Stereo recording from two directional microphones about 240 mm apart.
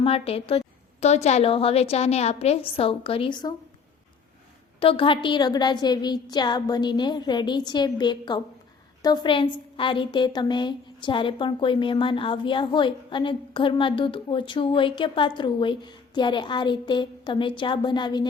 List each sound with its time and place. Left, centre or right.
0.0 s a woman's voice: left
4.8 s a woman's voice: left